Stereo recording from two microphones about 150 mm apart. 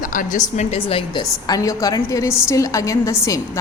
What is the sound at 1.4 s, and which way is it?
A woman's voice, 25° left (ahead or behind).